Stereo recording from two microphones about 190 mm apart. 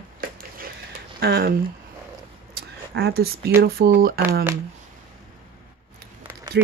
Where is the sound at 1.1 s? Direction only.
55° right (ahead or behind).